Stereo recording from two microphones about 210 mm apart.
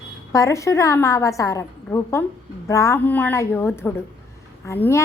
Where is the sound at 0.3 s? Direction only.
15° left (ahead or behind).